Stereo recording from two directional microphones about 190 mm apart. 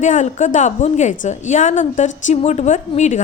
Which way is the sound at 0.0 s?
40° left (ahead or behind).